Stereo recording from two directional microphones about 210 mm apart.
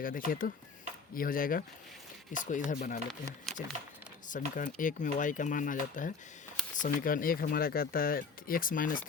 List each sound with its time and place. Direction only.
0.0 s speech: 40° left (ahead or behind)
3.5 s a sound: centre (ahead or behind)
4.3 s speech: 40° left (ahead or behind)